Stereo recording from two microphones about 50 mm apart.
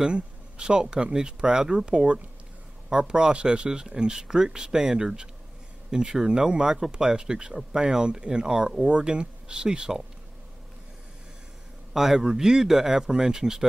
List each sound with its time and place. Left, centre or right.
0.0 s speech: centre
11.9 s speech: centre